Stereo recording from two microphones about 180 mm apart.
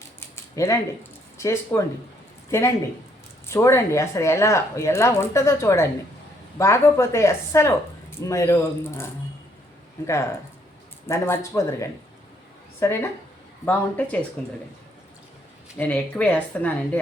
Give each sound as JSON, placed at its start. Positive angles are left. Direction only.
{"t": 0.3, "sound": "a sound", "side_deg": 15}
{"t": 1.4, "sound": "speech", "side_deg": 15}
{"t": 11.0, "sound": "speech", "side_deg": 15}
{"t": 15.8, "sound": "speech", "side_deg": 5}